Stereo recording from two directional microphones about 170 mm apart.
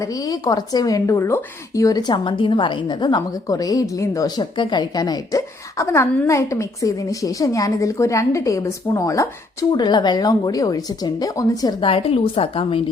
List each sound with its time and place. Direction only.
0.0 s a woman's voice: 20° left (ahead or behind)